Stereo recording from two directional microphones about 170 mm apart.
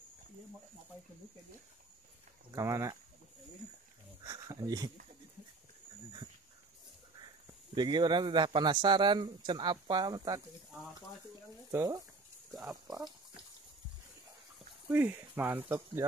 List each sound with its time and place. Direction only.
2.5 s speech: 20° right (ahead or behind)
4.2 s a man's voice: 20° right (ahead or behind)
7.7 s a man's voice: 25° right (ahead or behind)
11.7 s a man's voice: 20° right (ahead or behind)
14.9 s speech: 10° right (ahead or behind)